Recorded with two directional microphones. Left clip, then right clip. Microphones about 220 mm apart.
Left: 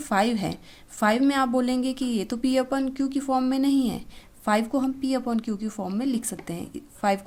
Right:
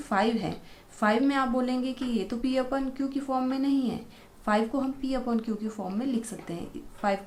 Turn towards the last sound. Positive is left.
turn(degrees=45)  # may be behind; listen again after turning